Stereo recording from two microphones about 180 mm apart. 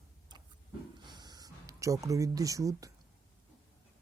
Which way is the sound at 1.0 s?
25° right (ahead or behind).